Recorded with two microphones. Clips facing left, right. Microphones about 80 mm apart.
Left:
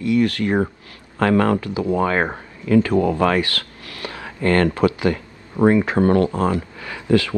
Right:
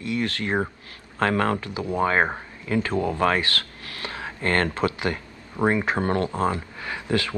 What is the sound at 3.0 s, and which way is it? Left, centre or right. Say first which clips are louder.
Speech: left 5 dB; left.